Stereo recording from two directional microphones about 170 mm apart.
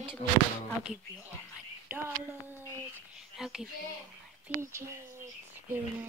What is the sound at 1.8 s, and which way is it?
Speech, 15° right (ahead or behind).